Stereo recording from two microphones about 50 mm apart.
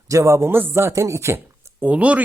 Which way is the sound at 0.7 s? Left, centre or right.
Right.